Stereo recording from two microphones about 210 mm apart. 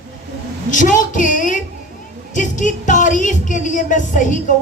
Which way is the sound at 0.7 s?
40° left (ahead or behind).